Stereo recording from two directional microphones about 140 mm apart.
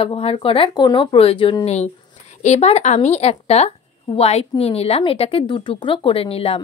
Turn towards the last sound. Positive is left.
turn(degrees=45)  # may be behind; listen again after turning